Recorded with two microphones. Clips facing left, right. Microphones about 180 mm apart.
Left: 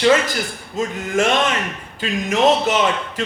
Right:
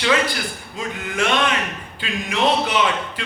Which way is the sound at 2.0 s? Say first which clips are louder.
Left 5 dB; 45° left (ahead or behind).